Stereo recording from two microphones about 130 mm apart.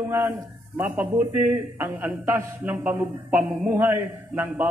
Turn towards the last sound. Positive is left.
turn(degrees=-15)  # may be behind; listen again after turning